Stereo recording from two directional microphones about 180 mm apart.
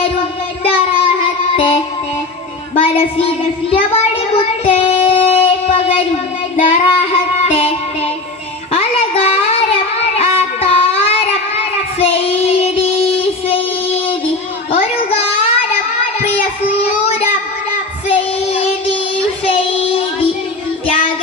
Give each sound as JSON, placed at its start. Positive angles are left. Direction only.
{"t": 0.7, "sound": "child singing", "side_deg": 30}
{"t": 2.8, "sound": "child singing", "side_deg": 30}
{"t": 4.6, "sound": "child singing", "side_deg": 30}
{"t": 8.7, "sound": "child singing", "side_deg": 35}